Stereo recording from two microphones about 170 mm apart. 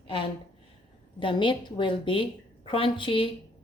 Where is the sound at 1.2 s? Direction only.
30° left (ahead or behind).